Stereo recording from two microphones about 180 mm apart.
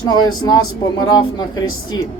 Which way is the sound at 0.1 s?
25° left (ahead or behind).